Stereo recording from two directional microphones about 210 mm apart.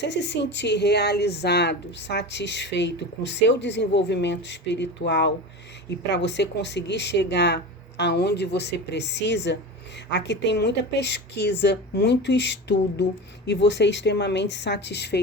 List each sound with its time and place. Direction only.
0.0 s speech: 55° left (ahead or behind)